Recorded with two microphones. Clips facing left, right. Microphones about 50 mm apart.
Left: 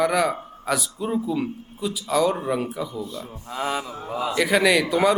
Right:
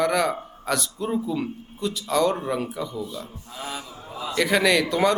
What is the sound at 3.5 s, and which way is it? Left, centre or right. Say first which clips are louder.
Mantra: left 9 dB; left.